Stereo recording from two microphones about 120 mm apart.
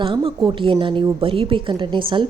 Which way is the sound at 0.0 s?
45° right (ahead or behind).